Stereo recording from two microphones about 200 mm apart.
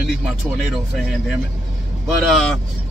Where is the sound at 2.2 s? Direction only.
Centre (ahead or behind).